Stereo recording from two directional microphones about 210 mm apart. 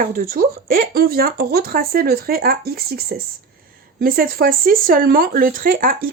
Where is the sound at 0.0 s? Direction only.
45° right (ahead or behind).